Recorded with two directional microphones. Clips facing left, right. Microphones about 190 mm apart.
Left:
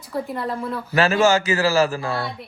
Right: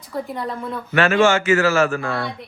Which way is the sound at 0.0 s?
Centre (ahead or behind).